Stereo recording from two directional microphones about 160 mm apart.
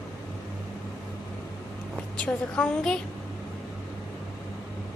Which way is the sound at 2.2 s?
5° left (ahead or behind).